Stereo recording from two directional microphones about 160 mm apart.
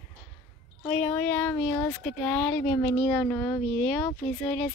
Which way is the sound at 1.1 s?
10° left (ahead or behind).